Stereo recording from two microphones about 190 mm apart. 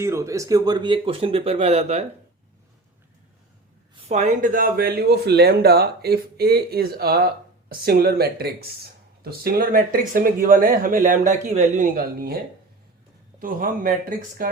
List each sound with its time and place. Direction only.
0.0 s speech: 15° right (ahead or behind); by 2.0 s 35° right (ahead or behind)
4.1 s speech: 40° right (ahead or behind)
13.4 s speech: 45° right (ahead or behind)